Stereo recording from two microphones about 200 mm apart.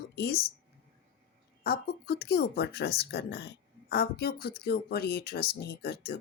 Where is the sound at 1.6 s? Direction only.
50° left (ahead or behind).